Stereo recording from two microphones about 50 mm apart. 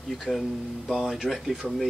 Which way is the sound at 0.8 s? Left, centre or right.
Centre.